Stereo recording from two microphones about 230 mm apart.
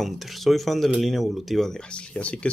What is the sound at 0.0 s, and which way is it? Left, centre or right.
Speech, centre.